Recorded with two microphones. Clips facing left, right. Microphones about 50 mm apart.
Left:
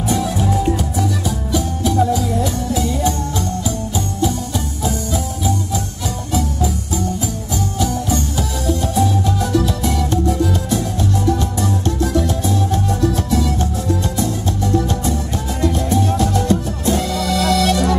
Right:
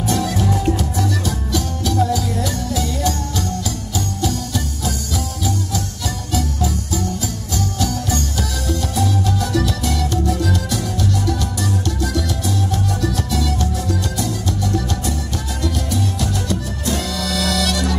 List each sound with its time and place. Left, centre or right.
0.0 s music: centre
4.8 s music: left